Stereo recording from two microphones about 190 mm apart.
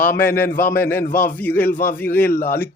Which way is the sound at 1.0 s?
45° left (ahead or behind).